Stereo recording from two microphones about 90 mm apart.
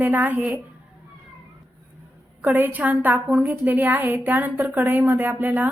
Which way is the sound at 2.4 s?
20° right (ahead or behind).